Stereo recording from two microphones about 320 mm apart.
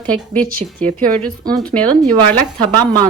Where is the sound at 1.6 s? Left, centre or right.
Centre.